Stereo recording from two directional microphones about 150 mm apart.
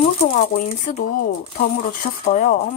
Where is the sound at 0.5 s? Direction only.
55° left (ahead or behind).